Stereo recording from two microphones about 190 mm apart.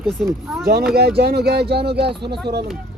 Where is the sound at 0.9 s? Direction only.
55° right (ahead or behind).